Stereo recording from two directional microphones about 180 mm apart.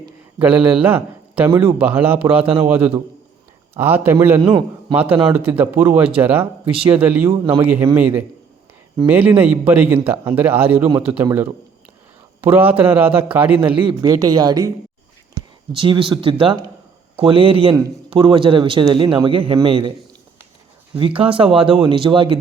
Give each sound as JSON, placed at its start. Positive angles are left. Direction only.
{"t": 0.3, "sound": "speech", "side_deg": -10}
{"t": 4.4, "sound": "a man's voice", "side_deg": -25}
{"t": 4.9, "sound": "speech", "side_deg": -10}
{"t": 12.4, "sound": "speech", "side_deg": -10}
{"t": 13.8, "sound": "a man's voice", "side_deg": -20}
{"t": 21.2, "sound": "a man's voice", "side_deg": -30}